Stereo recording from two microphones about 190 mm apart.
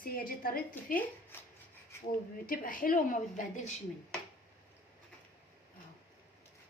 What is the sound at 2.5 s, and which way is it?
A woman's voice, 45° left (ahead or behind).